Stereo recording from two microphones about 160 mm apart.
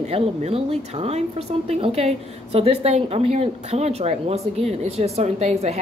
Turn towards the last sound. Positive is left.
turn(degrees=-45)  # may be behind; listen again after turning